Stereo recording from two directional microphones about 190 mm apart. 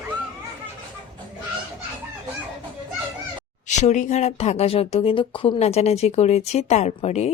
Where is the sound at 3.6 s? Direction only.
40° left (ahead or behind).